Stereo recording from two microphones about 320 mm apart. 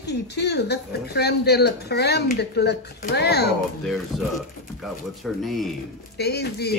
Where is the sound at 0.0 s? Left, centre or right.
Left.